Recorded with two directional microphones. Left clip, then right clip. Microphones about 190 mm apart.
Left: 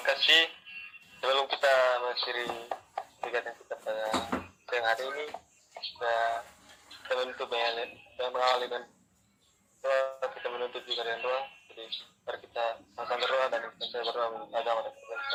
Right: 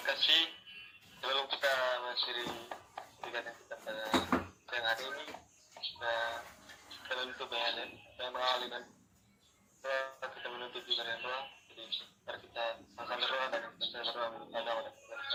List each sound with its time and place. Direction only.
0.0 s speech: 45° left (ahead or behind)
9.8 s speech: 40° left (ahead or behind)